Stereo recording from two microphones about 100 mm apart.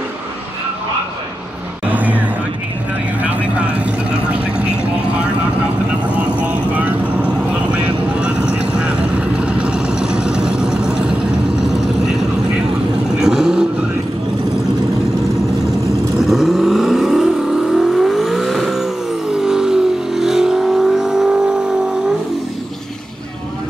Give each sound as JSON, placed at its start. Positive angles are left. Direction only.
{"t": 1.9, "sound": "vehicle", "side_deg": -15}
{"t": 6.4, "sound": "vehicle", "side_deg": -15}
{"t": 13.2, "sound": "vehicle", "side_deg": -5}
{"t": 16.2, "sound": "vehicle", "side_deg": -5}